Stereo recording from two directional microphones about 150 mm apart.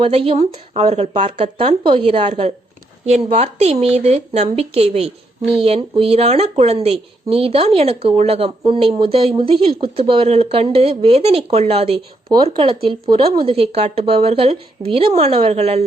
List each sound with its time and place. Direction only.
0.0 s speech: 40° right (ahead or behind)
2.2 s speech: 50° right (ahead or behind)